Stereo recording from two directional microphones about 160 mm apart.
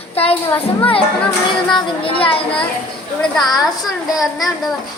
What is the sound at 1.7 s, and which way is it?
Speech, 35° left (ahead or behind).